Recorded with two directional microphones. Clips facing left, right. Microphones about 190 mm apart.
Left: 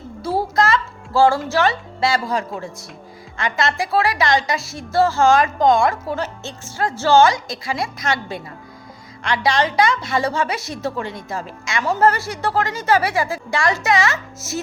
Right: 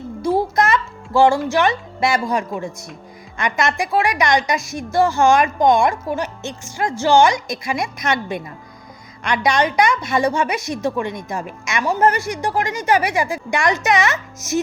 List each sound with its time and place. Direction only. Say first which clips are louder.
0.5 s music: even; 20° right (ahead or behind)
1.5 s a woman's voice: right 1 dB; 15° right (ahead or behind)